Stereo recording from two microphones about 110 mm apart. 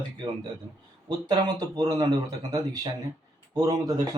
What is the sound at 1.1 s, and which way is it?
Speech, 40° right (ahead or behind).